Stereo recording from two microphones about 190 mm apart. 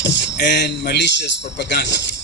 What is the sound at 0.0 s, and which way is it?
A man's voice, 65° left (ahead or behind).